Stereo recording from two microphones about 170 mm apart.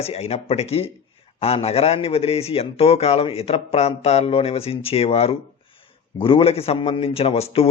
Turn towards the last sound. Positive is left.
turn(degrees=35)  # may be behind; listen again after turning